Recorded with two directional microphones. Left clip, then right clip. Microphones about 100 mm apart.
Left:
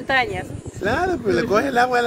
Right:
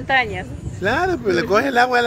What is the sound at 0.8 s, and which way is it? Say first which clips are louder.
Speech: right 2 dB; 25° right (ahead or behind).